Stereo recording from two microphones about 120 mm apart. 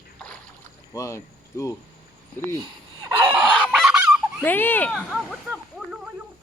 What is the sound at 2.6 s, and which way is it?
Chicken, 45° right (ahead or behind).